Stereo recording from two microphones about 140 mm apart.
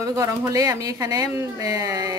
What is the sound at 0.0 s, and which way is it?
Speech, 25° right (ahead or behind).